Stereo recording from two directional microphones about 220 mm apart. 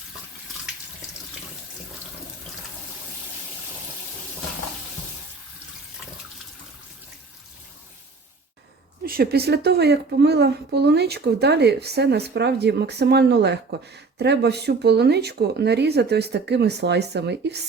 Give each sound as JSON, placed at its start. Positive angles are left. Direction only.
{"t": 9.0, "sound": "a woman's voice", "side_deg": -45}